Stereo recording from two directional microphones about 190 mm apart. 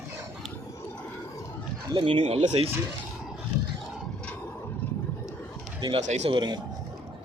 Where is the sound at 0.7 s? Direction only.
15° left (ahead or behind).